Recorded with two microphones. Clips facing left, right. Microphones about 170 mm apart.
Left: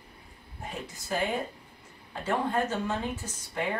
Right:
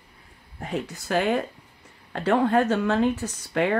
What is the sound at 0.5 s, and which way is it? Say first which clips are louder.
Speech: right 9 dB; 70° right (ahead or behind).